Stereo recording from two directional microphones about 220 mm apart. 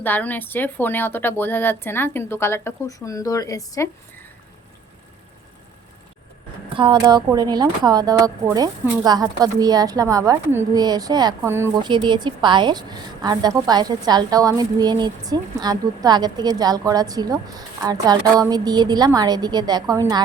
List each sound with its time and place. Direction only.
0.0 s speech: 10° left (ahead or behind)
6.7 s speech: 20° right (ahead or behind)